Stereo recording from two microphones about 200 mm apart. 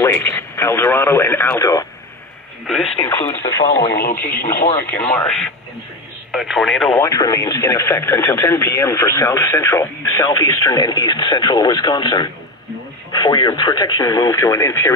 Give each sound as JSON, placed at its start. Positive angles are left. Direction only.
{"t": 0.0, "sound": "speech", "side_deg": 10}
{"t": 2.7, "sound": "speech", "side_deg": 0}
{"t": 3.4, "sound": "speech", "side_deg": 15}
{"t": 4.0, "sound": "speech", "side_deg": 50}
{"t": 4.3, "sound": "speech", "side_deg": 10}
{"t": 7.0, "sound": "speech", "side_deg": 20}